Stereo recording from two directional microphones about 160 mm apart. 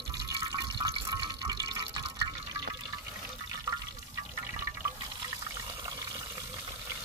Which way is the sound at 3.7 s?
20° right (ahead or behind).